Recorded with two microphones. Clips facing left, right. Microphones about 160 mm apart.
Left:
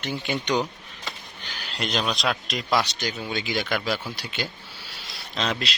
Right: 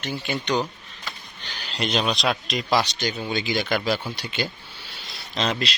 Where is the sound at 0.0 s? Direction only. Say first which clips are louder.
Even; 15° left (ahead or behind).